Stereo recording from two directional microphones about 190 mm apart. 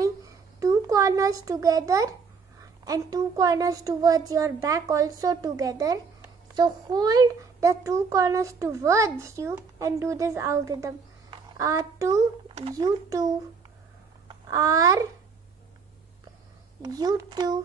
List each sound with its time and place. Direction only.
0.0 s a sound: 15° right (ahead or behind)
2.6 s a woman's voice: 20° right (ahead or behind)
16.8 s a child's voice: 20° right (ahead or behind)